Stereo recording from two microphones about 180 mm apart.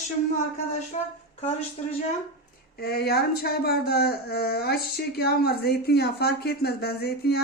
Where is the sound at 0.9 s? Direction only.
40° left (ahead or behind).